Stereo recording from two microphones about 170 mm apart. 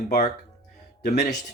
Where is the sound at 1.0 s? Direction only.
60° left (ahead or behind).